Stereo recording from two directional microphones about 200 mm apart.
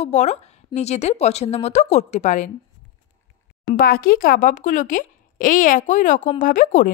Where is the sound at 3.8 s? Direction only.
45° left (ahead or behind).